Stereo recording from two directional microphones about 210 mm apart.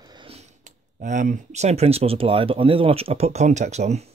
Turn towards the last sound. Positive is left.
turn(degrees=-30)  # may be behind; listen again after turning